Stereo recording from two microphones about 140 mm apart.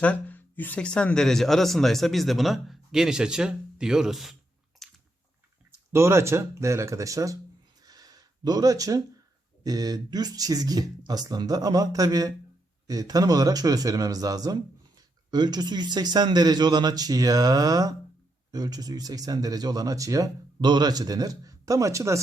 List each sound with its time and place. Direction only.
0.0 s speech: 10° left (ahead or behind)
4.8 s chewing: centre (ahead or behind)
5.9 s a man's voice: 20° right (ahead or behind)
7.8 s a sound: 30° right (ahead or behind)
9.6 s a man's voice: 25° right (ahead or behind)